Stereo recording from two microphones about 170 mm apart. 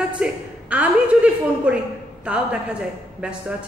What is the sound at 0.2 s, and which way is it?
A woman's voice, 10° right (ahead or behind).